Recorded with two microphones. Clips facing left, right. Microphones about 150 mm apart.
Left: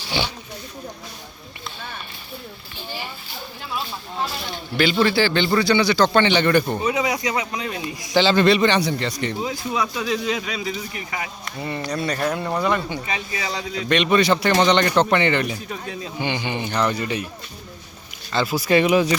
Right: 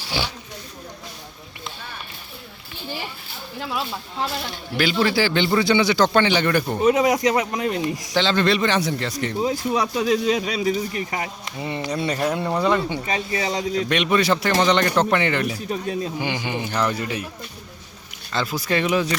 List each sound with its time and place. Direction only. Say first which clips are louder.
0.1 s a man's voice: left 2 dB; 5° right (ahead or behind)
4.8 s speech: left 2 dB; 5° right (ahead or behind)
6.1 s a man's voice: left 2 dB; 5° right (ahead or behind)
6.8 s speech: right 5 dB; 50° right (ahead or behind)
8.1 s a man's voice: left 4 dB; 5° left (ahead or behind)
9.4 s speech: right 5 dB; 35° right (ahead or behind)
11.4 s speech: even; 20° right (ahead or behind); by 13.8 s 40° right (ahead or behind)
13.8 s a man's voice: left 4 dB; 5° right (ahead or behind)
15.5 s speech: right 5 dB; 35° right (ahead or behind)
16.1 s a man's voice: even; 5° right (ahead or behind)
18.3 s speech: left 4 dB; 5° left (ahead or behind)